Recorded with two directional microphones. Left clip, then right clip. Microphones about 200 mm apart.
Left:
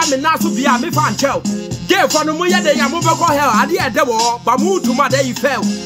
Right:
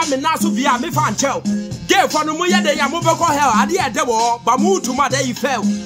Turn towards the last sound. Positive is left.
turn(degrees=-10)  # may be behind; listen again after turning